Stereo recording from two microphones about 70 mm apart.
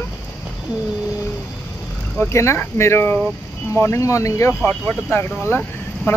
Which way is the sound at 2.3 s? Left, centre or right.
Left.